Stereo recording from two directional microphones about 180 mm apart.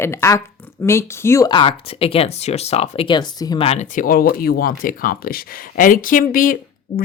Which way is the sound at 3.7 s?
45° left (ahead or behind).